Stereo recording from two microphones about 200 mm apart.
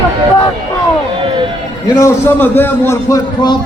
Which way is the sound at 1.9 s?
10° left (ahead or behind).